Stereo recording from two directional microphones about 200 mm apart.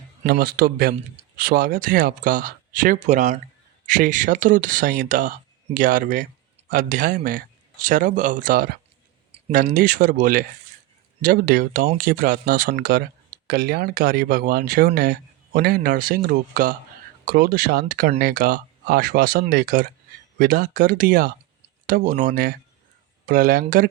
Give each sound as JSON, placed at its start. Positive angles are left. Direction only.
{"t": 0.3, "sound": "speech", "side_deg": -50}